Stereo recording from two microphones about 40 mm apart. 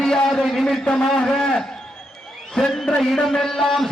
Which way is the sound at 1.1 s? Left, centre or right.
Centre.